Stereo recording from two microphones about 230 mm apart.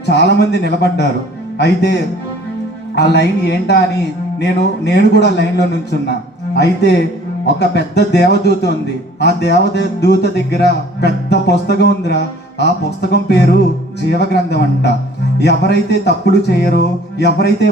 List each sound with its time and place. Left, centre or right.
0.0 s speech: left